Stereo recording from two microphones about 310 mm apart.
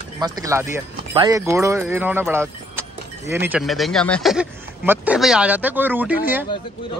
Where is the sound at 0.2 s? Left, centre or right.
Centre.